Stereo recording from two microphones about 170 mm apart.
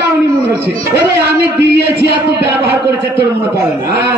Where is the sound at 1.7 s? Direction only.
75° right (ahead or behind).